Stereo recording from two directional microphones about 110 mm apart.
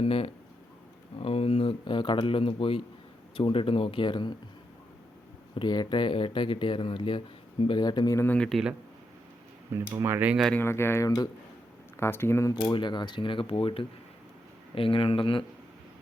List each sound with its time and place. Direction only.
0.0 s speech: 55° left (ahead or behind)
5.5 s speech: 40° left (ahead or behind)
8.1 s speech: 20° left (ahead or behind)
8.4 s speech: 5° left (ahead or behind)
9.7 s speech: 25° right (ahead or behind)
10.5 s speech: 20° left (ahead or behind)
12.5 s speech: 45° left (ahead or behind)